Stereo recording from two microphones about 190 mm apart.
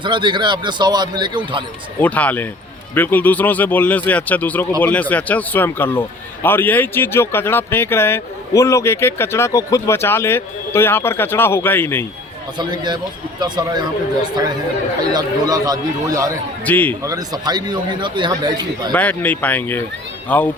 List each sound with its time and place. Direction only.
0.0 s a man's voice: 25° right (ahead or behind)
2.0 s a man's voice: 10° left (ahead or behind)
12.5 s a man's voice: 25° right (ahead or behind)
15.1 s a man's voice: 20° right (ahead or behind)
16.6 s a man's voice: 10° left (ahead or behind)
17.0 s a man's voice: 20° right (ahead or behind)
18.9 s a man's voice: 10° left (ahead or behind)